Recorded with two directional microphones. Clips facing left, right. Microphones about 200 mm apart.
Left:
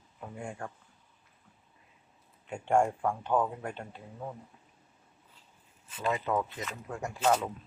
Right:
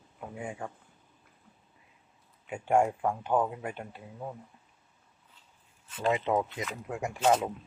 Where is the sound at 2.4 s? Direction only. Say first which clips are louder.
Right 1 dB; 5° right (ahead or behind).